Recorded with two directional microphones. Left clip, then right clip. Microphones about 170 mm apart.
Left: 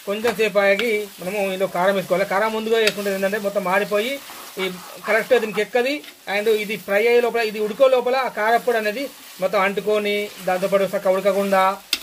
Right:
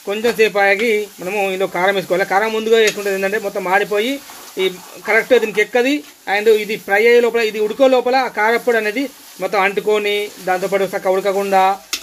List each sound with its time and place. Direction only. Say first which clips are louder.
0.1 s speech: right 4 dB; 50° right (ahead or behind)